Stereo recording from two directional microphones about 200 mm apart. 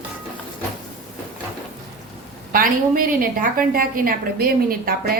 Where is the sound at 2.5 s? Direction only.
45° right (ahead or behind).